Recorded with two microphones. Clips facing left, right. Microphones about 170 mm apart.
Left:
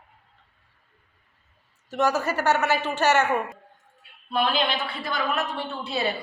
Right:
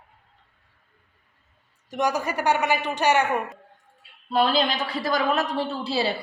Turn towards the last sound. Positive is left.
turn(degrees=-30)  # may be behind; listen again after turning